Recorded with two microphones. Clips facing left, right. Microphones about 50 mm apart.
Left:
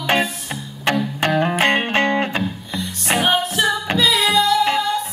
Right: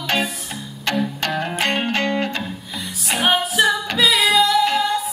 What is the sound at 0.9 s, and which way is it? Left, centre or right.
Music, left.